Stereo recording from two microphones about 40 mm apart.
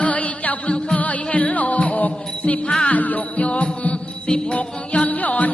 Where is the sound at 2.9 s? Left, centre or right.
Left.